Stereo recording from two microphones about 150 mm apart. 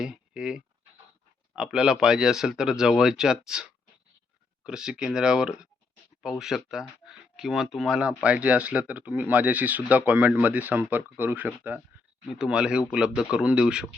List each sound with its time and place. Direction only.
0.0 s speech: 5° right (ahead or behind)